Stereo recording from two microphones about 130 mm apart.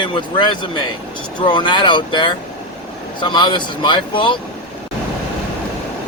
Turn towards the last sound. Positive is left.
turn(degrees=40)  # may be behind; listen again after turning